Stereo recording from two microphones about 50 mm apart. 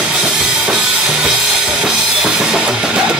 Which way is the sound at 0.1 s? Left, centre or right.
Centre.